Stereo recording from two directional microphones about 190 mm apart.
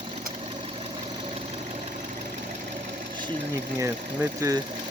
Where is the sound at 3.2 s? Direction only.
20° right (ahead or behind).